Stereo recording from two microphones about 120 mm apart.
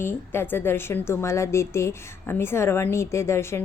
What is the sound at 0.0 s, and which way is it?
A woman's voice, 20° left (ahead or behind).